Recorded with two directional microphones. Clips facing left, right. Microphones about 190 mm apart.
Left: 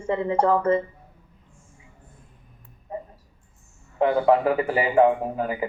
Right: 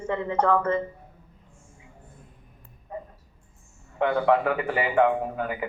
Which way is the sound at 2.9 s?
30° left (ahead or behind).